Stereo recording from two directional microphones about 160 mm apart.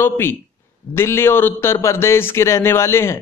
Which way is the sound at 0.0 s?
15° left (ahead or behind).